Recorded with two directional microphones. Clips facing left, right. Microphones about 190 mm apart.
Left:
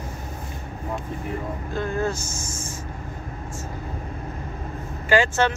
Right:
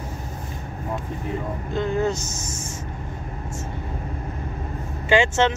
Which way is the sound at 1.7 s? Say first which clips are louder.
Right 3 dB; 20° right (ahead or behind).